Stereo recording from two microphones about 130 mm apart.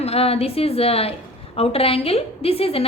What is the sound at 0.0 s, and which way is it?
A woman's voice, 50° left (ahead or behind).